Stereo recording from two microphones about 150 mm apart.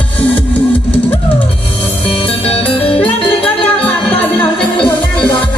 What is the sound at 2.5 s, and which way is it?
Music, 40° left (ahead or behind).